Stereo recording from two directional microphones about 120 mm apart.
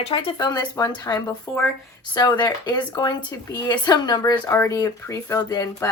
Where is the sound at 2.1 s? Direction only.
35° left (ahead or behind).